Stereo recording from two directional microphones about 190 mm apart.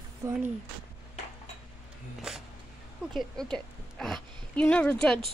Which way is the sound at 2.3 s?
5° right (ahead or behind).